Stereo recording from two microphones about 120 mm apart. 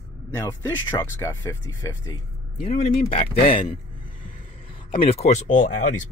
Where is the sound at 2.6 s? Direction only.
60° left (ahead or behind); by 3.8 s 45° left (ahead or behind).